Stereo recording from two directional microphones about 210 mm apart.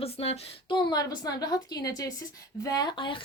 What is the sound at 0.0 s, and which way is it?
A woman's voice, 30° left (ahead or behind).